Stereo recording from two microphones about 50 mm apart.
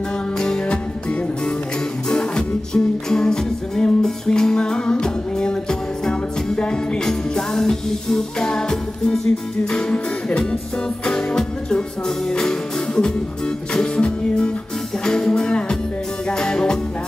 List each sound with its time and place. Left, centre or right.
0.4 s music: centre
2.0 s music: centre